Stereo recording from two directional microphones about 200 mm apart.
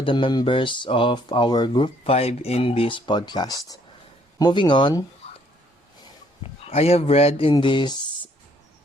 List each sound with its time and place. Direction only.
0.0 s speech: 25° left (ahead or behind)
6.7 s speech: 30° left (ahead or behind)